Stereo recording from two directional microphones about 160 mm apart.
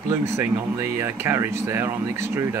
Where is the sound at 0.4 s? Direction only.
15° right (ahead or behind).